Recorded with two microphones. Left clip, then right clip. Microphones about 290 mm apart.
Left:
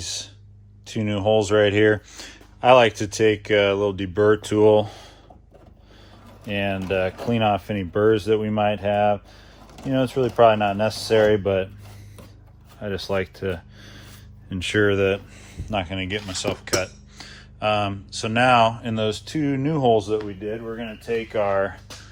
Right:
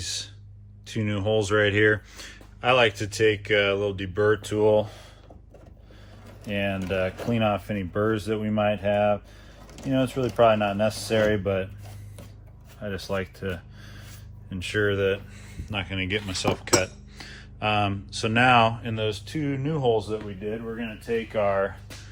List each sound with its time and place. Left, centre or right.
0.0 s a sound: centre
0.9 s speech: centre; by 5.0 s left
6.4 s speech: left
12.8 s speech: left